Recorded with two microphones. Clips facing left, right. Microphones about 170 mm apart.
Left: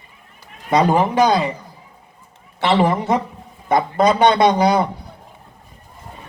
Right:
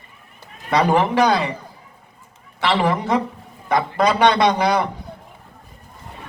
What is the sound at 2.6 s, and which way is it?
A man's voice, 25° left (ahead or behind).